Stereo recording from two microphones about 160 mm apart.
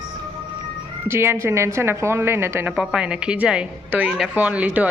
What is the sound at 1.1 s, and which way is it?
A woman's voice, 15° right (ahead or behind).